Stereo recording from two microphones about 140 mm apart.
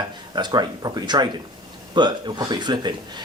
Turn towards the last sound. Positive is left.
turn(degrees=-30)  # may be behind; listen again after turning